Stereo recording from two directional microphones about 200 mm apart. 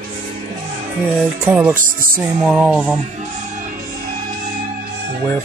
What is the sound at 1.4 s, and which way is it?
Music, 10° right (ahead or behind).